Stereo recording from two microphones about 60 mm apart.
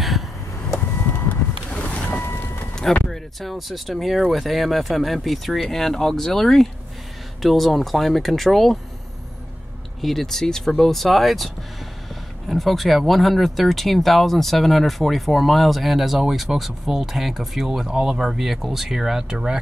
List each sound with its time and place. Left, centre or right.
1.7 s boat: centre
2.2 s a sound: left
2.7 s speech: centre
10.0 s speech: centre